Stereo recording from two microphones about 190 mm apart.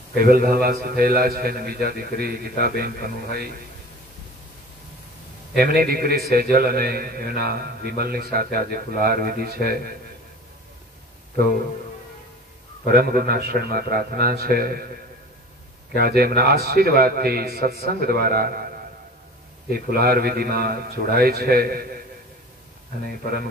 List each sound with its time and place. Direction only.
0.2 s a man's voice: 50° right (ahead or behind)
5.6 s a man's voice: 50° right (ahead or behind)
12.8 s a man's voice: 50° right (ahead or behind)
15.9 s a man's voice: 55° right (ahead or behind)
19.7 s a man's voice: 55° right (ahead or behind)